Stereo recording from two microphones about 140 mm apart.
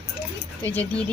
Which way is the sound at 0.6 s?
10° left (ahead or behind).